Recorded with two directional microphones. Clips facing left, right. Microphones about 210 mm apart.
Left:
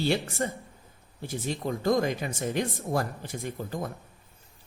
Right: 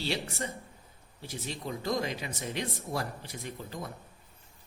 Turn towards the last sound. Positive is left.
turn(degrees=50)  # may be behind; listen again after turning